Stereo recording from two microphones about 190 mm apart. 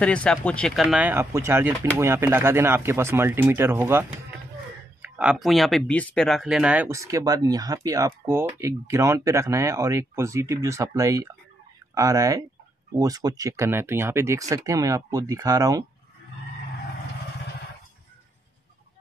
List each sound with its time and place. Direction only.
0.0 s speech: 5° left (ahead or behind); by 15.8 s 20° right (ahead or behind)